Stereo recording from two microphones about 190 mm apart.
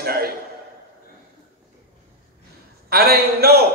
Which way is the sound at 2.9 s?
55° right (ahead or behind).